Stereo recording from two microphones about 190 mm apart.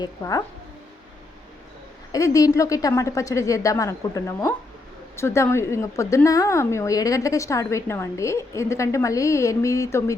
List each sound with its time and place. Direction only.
0.0 s speech: 20° left (ahead or behind)
2.1 s a woman's voice: 15° left (ahead or behind)